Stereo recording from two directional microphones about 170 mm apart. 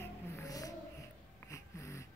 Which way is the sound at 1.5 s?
15° left (ahead or behind).